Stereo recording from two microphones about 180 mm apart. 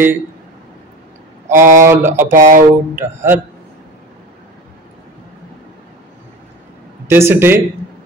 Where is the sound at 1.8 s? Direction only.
15° right (ahead or behind).